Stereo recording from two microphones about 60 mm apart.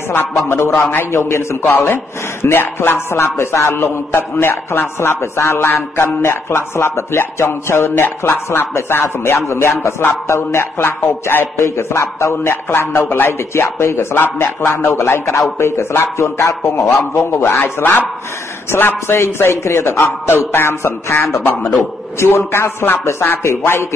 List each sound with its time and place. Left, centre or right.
0.1 s a man's voice: left